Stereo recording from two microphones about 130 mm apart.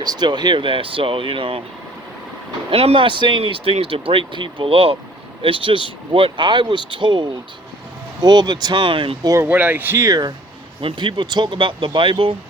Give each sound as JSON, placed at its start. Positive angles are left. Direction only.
{"t": 0.0, "sound": "speech", "side_deg": -35}
{"t": 2.6, "sound": "speech", "side_deg": -45}
{"t": 9.3, "sound": "speech", "side_deg": -15}
{"t": 10.8, "sound": "speech", "side_deg": -40}